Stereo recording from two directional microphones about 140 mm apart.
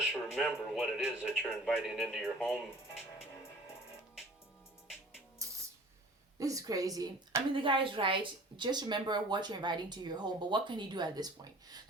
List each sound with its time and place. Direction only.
0.0 s a man's voice: 5° right (ahead or behind)
6.4 s a woman's voice: 25° right (ahead or behind)
7.5 s speech: 40° right (ahead or behind)